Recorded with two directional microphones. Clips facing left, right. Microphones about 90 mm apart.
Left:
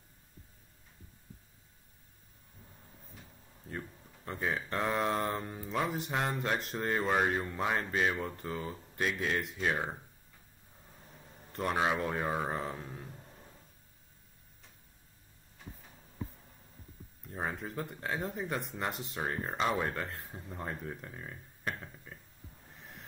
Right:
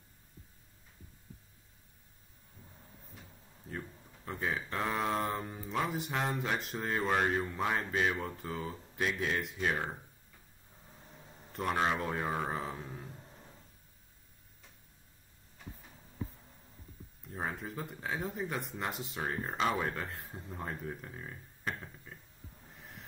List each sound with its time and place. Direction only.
3.6 s speech: centre (ahead or behind)
11.5 s speech: 5° left (ahead or behind)
17.3 s speech: centre (ahead or behind)
21.8 s a sound: centre (ahead or behind)